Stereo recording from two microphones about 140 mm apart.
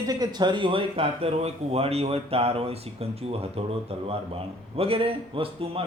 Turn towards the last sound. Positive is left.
turn(degrees=-40)  # may be behind; listen again after turning